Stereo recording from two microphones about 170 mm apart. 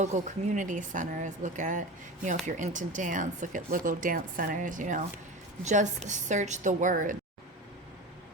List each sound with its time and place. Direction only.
0.0 s speech: 45° right (ahead or behind)